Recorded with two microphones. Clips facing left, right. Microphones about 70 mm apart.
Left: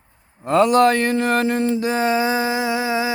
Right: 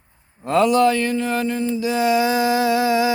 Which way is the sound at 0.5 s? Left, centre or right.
Left.